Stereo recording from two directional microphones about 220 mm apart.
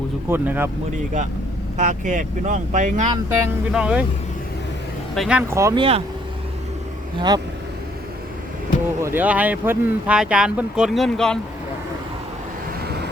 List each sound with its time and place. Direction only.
0.3 s speech: 10° right (ahead or behind)
1.8 s speech: 35° right (ahead or behind)
3.2 s speech: 5° right (ahead or behind)
5.1 s speech: centre (ahead or behind)
7.2 s speech: 20° right (ahead or behind)
9.0 s speech: 10° right (ahead or behind)